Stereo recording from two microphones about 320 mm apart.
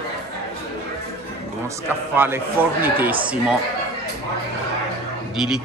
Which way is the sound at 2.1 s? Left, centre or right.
Centre.